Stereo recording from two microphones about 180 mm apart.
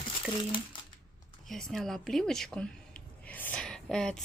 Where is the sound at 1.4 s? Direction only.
Centre (ahead or behind).